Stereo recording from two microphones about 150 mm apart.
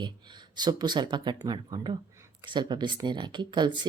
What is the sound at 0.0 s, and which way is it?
Speech, 30° right (ahead or behind).